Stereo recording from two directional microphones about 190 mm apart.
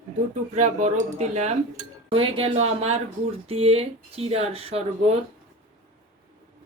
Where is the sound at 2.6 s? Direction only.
90° right.